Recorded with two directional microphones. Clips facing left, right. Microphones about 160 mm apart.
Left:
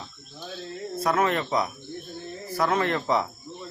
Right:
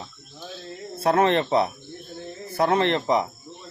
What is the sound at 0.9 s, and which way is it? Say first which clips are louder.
Speech: right 4 dB; 30° right (ahead or behind).